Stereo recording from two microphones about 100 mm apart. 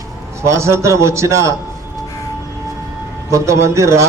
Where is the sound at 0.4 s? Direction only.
30° right (ahead or behind).